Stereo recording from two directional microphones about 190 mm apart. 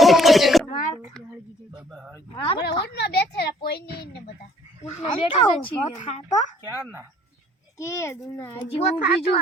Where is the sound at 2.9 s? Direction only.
60° left (ahead or behind).